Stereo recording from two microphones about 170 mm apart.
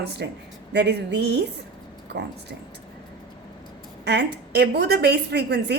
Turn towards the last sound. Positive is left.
turn(degrees=-75)  # may be behind; listen again after turning